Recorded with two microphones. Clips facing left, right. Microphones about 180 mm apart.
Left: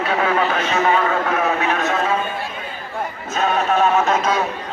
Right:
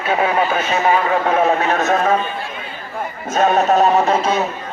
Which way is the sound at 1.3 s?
35° right (ahead or behind).